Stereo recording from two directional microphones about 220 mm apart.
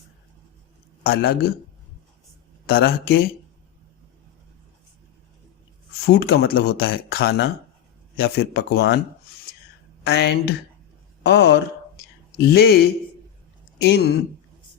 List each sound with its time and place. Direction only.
1.0 s speech: 45° left (ahead or behind)
2.6 s speech: 45° left (ahead or behind)
6.1 s speech: 45° left (ahead or behind)
10.1 s speech: 50° left (ahead or behind)